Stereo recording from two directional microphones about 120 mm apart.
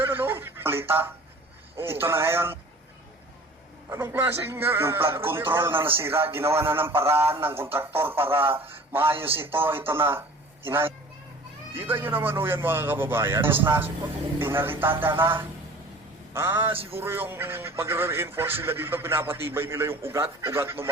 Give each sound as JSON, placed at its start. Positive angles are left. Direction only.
{"t": 0.0, "sound": "a sound", "side_deg": -20}
{"t": 1.7, "sound": "a man's voice", "side_deg": -20}
{"t": 3.8, "sound": "a man's voice", "side_deg": -20}
{"t": 16.7, "sound": "music", "side_deg": -50}
{"t": 17.0, "sound": "a man's voice", "side_deg": -20}